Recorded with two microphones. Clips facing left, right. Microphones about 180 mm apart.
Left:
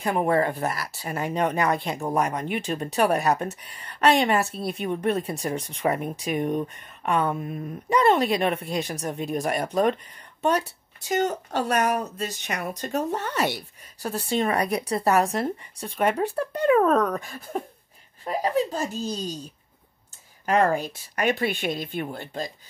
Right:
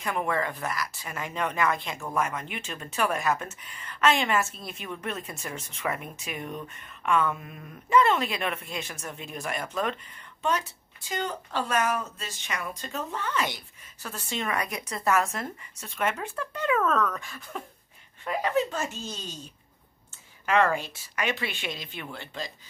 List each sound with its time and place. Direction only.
0.0 s speech: 35° left (ahead or behind)
11.1 s speech: 45° left (ahead or behind)